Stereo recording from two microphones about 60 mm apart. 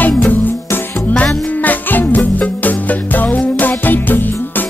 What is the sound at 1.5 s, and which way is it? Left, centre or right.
Music, left.